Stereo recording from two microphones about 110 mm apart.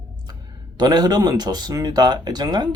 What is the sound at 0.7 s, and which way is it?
Speech, 40° right (ahead or behind).